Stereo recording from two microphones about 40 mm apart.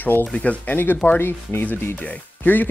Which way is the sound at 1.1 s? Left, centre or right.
Left.